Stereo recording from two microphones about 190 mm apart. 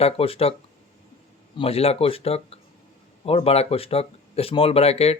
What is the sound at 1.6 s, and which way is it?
Speech, 30° left (ahead or behind).